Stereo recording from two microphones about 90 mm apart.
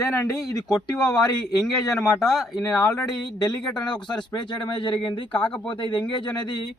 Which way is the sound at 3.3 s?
50° left (ahead or behind).